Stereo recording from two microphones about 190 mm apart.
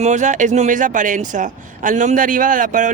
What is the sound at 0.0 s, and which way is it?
Speech, 40° right (ahead or behind).